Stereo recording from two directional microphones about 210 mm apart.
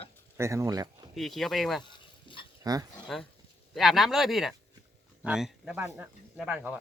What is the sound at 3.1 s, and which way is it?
Speech, centre (ahead or behind).